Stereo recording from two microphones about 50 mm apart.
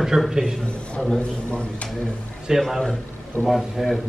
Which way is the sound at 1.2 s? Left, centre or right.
Left.